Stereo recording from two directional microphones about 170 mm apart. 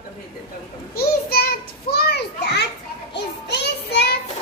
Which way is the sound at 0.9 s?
65° left (ahead or behind).